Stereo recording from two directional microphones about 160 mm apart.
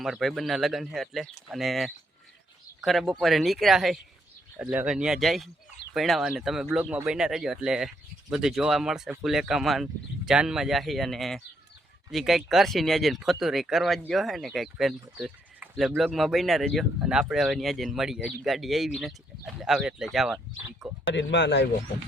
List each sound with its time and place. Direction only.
0.0 s speech: centre (ahead or behind)
15.6 s a sound: 10° right (ahead or behind)
16.0 s speech: centre (ahead or behind)
21.2 s speech: 90° left